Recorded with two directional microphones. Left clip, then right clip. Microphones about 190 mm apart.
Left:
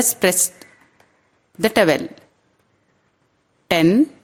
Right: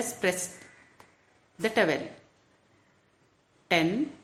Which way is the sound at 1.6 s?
55° left (ahead or behind).